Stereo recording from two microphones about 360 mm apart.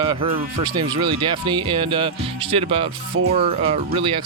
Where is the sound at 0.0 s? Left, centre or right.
Centre.